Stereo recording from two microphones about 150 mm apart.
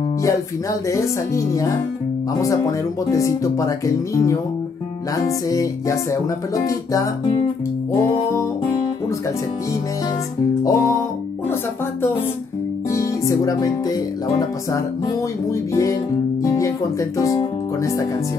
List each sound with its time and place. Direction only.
0.2 s speech: 20° left (ahead or behind)
10.6 s speech: 20° left (ahead or behind)
12.9 s music: 20° left (ahead or behind)
15.5 s speech: 20° left (ahead or behind)
16.4 s music: 20° left (ahead or behind)
17.2 s speech: 20° left (ahead or behind)